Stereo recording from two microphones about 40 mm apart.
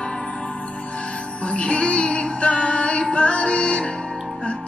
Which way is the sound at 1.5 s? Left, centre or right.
Left.